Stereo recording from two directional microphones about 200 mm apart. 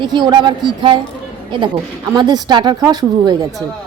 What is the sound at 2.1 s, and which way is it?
Speech, 20° right (ahead or behind).